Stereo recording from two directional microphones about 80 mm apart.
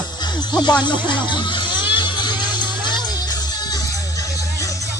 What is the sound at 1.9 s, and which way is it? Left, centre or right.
Music, left.